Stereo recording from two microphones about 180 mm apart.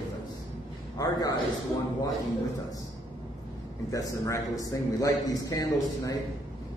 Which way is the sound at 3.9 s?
15° left (ahead or behind).